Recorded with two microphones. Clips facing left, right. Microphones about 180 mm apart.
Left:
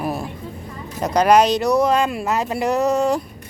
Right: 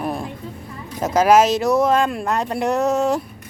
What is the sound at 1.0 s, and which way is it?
Speech, centre (ahead or behind).